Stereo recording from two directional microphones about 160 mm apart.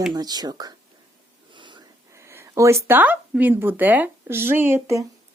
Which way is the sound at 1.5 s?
30° right (ahead or behind).